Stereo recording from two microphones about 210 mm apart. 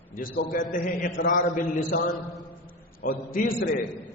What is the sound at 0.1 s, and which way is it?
A man's voice, 40° left (ahead or behind).